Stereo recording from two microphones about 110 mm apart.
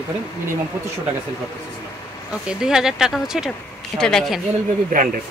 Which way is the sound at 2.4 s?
5° right (ahead or behind).